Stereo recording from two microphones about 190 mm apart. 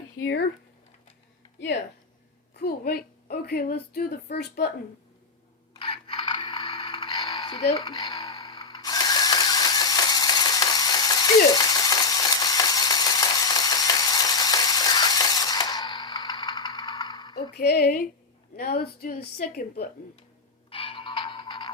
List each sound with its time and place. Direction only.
1.5 s speech: 70° left (ahead or behind)
2.6 s a woman's voice: 55° left (ahead or behind)
5.7 s mechanisms: 25° left (ahead or behind)
17.5 s a woman's voice: 55° left (ahead or behind)
20.7 s a sound: 30° left (ahead or behind)